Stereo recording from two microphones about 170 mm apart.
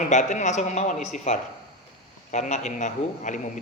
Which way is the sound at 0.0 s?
45° left (ahead or behind).